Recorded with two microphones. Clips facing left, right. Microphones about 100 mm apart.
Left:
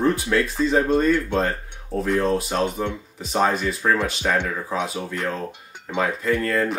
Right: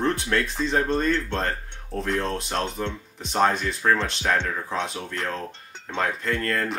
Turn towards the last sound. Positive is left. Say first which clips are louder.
# left 4 dB
turn(degrees=5)  # may be behind; listen again after turning